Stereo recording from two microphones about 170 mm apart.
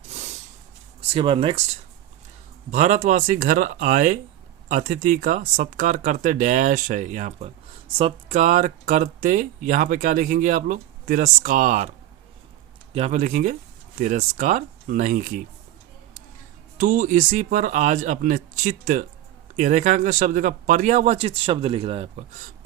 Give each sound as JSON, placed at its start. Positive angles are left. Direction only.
{"t": 0.1, "sound": "a sound", "side_deg": -40}
{"t": 1.1, "sound": "speech", "side_deg": -30}
{"t": 2.7, "sound": "speech", "side_deg": -45}
{"t": 16.7, "sound": "speech", "side_deg": -50}